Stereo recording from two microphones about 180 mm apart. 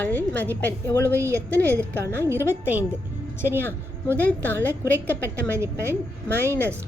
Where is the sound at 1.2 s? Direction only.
15° right (ahead or behind).